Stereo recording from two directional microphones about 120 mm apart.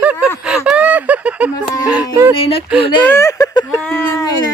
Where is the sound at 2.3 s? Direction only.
50° left (ahead or behind).